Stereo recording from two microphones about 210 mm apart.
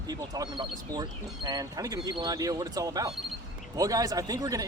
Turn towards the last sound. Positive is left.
turn(degrees=-15)  # may be behind; listen again after turning